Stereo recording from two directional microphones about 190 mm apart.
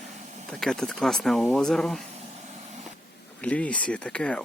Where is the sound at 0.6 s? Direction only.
Centre (ahead or behind).